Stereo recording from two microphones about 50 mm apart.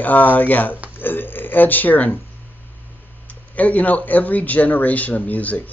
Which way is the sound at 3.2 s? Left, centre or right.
Left.